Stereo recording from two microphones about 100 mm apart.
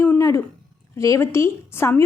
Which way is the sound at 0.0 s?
25° left (ahead or behind).